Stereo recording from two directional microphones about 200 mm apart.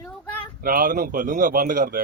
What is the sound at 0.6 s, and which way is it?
Speech, 45° right (ahead or behind).